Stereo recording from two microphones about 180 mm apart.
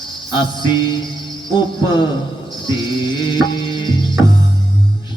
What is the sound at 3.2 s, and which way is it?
Music, 25° left (ahead or behind).